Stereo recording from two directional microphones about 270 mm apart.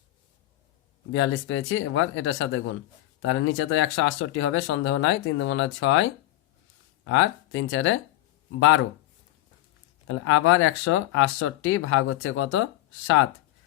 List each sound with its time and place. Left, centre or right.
1.1 s speech: left
10.1 s speech: left